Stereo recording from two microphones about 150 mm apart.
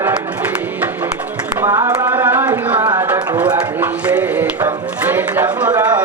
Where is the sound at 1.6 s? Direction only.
20° right (ahead or behind).